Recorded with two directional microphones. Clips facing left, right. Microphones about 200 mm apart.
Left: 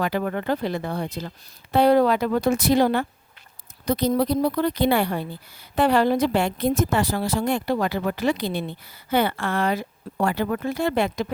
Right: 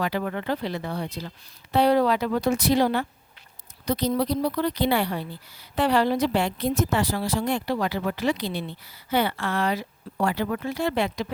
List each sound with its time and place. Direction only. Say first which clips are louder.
0.0 s a woman's voice: left 3 dB; 50° left (ahead or behind)